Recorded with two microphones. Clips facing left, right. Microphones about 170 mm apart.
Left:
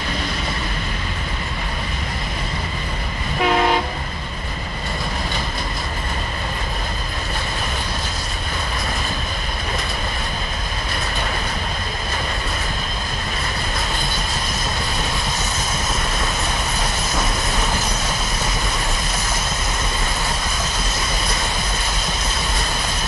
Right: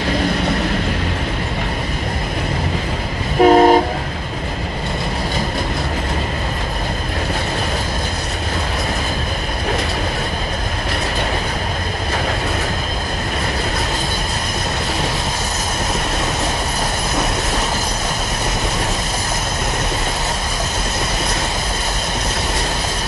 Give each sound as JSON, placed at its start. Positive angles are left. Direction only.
{"t": 3.3, "sound": "train", "side_deg": -40}